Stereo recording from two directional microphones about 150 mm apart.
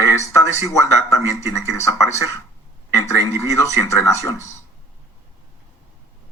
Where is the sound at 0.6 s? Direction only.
20° left (ahead or behind).